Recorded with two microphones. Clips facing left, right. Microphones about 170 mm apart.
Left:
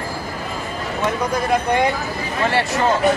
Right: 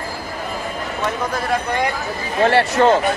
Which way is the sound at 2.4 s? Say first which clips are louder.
Right 5 dB; 65° right (ahead or behind).